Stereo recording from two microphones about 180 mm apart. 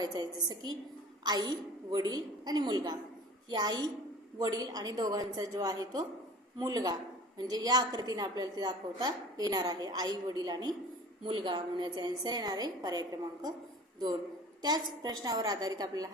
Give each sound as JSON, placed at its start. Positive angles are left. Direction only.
{"t": 0.0, "sound": "a woman's voice", "side_deg": -20}
{"t": 14.6, "sound": "a woman's voice", "side_deg": -25}